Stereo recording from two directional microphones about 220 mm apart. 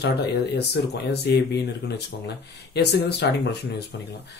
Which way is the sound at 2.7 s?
50° left (ahead or behind).